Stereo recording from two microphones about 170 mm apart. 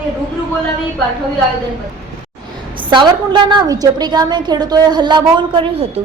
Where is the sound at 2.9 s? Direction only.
25° right (ahead or behind).